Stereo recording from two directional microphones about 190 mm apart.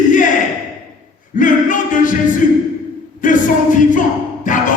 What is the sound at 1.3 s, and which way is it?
A man's voice, 45° left (ahead or behind).